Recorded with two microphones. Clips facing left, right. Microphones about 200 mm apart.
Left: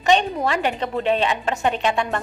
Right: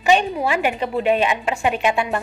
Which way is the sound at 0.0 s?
10° right (ahead or behind).